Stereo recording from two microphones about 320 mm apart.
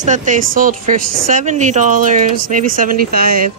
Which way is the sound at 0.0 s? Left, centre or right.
Right.